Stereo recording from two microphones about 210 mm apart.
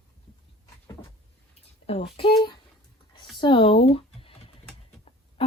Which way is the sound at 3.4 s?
25° left (ahead or behind).